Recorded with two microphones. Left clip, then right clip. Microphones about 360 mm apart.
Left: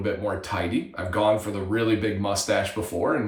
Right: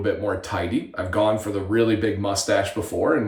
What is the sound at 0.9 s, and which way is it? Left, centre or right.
Speech, centre.